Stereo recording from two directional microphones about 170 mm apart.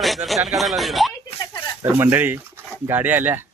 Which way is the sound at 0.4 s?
Centre (ahead or behind).